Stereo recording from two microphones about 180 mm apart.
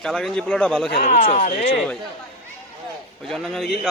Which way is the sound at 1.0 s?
45° left (ahead or behind).